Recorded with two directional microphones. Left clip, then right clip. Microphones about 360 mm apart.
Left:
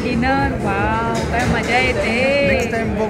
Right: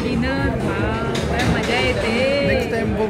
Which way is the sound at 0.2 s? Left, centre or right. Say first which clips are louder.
Left 4 dB; centre.